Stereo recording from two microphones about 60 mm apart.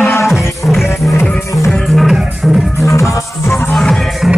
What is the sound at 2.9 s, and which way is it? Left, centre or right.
Music, left.